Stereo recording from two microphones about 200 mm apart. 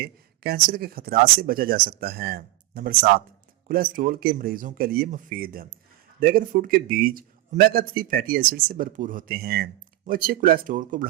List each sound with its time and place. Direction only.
0.0 s speech: 50° right (ahead or behind)